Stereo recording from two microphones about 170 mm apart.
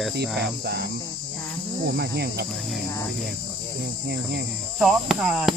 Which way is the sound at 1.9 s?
70° right (ahead or behind).